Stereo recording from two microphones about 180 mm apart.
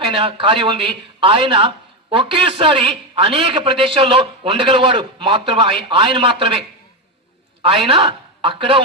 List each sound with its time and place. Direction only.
0.0 s a man's voice: 30° right (ahead or behind)
7.6 s a man's voice: 30° right (ahead or behind)